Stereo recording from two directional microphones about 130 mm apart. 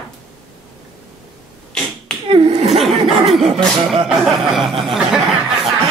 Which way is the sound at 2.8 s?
Centre (ahead or behind).